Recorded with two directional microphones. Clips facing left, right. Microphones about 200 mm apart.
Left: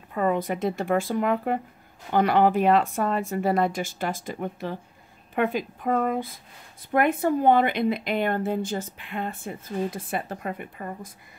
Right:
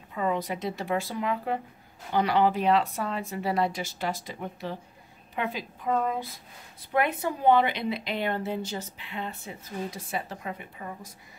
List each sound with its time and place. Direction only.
0.1 s a woman's voice: 50° left (ahead or behind)